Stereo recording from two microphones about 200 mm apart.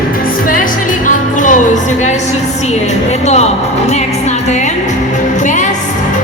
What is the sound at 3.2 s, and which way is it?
Speech, 35° left (ahead or behind).